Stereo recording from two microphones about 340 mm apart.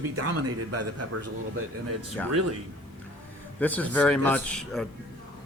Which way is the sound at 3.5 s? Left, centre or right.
Centre.